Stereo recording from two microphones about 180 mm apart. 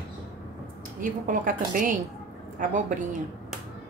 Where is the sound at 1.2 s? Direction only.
50° right (ahead or behind).